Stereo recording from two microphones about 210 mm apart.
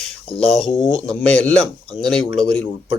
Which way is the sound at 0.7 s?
25° left (ahead or behind).